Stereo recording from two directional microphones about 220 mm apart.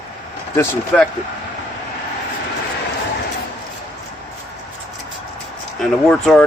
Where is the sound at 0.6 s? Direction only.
5° left (ahead or behind).